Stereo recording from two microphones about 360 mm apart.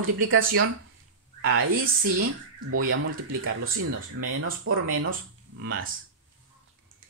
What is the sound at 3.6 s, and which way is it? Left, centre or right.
Speech, right.